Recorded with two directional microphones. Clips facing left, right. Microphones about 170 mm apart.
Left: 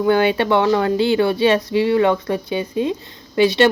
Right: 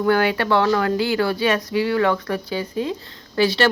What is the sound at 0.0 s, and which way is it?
Speech, 20° left (ahead or behind).